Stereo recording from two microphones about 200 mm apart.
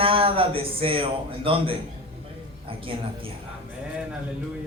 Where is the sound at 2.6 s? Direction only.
25° right (ahead or behind).